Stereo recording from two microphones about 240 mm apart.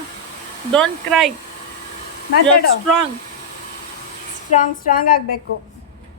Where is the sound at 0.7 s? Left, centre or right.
Centre.